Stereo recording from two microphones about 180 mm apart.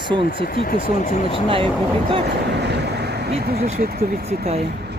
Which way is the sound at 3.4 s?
60° right (ahead or behind).